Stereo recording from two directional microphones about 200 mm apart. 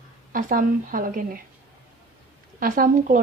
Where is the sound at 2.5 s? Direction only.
45° right (ahead or behind).